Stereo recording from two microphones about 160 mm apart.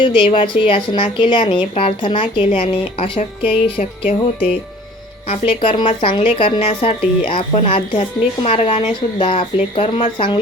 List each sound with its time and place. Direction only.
0.0 s a woman's voice: 30° left (ahead or behind)